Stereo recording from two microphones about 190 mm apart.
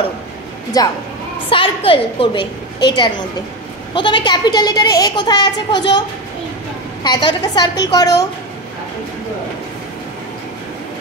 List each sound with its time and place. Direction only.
0.8 s a woman's voice: 20° left (ahead or behind)